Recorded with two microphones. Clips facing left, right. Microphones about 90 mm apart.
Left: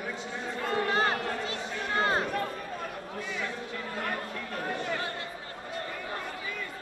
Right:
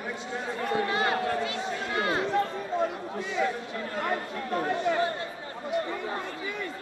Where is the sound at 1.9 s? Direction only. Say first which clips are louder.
Left 1 dB; 35° left (ahead or behind).